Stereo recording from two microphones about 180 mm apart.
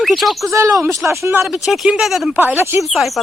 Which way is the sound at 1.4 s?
Centre (ahead or behind).